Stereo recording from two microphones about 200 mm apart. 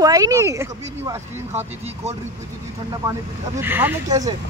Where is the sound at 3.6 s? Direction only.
10° right (ahead or behind).